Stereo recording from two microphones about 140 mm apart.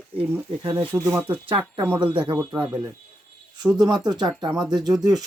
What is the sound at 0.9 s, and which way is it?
Speech, 25° right (ahead or behind).